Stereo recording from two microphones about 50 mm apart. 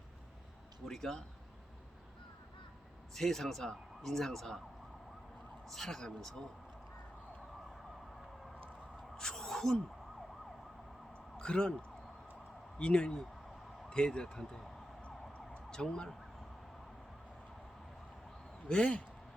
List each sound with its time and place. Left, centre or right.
0.9 s speech: centre
3.2 s speech: centre
5.6 s speech: centre
9.1 s a sound: centre
11.3 s speech: centre
15.0 s emergency vehicle: left
18.7 s speech: left